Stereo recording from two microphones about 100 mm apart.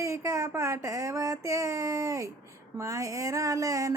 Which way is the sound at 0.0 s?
30° right (ahead or behind).